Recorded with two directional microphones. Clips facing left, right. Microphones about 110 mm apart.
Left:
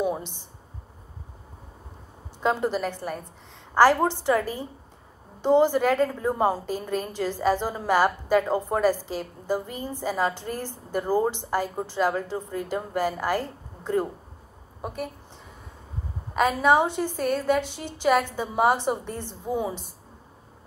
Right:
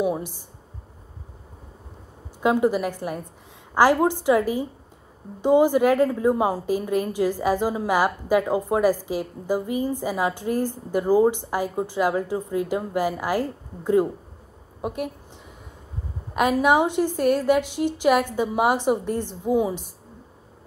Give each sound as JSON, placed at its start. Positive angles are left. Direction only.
{"t": 0.0, "sound": "a sound", "side_deg": -10}
{"t": 2.4, "sound": "a woman's voice", "side_deg": -10}
{"t": 16.3, "sound": "a woman's voice", "side_deg": -10}